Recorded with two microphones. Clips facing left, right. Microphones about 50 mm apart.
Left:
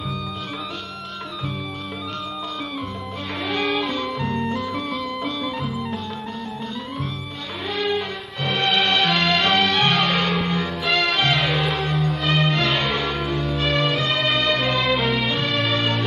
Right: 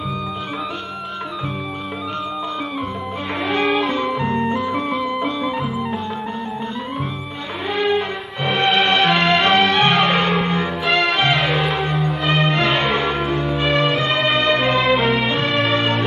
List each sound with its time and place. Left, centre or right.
3.5 s music: centre
7.7 s music: right
12.3 s music: centre